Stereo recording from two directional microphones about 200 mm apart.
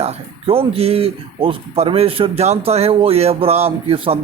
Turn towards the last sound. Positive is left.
turn(degrees=-25)  # may be behind; listen again after turning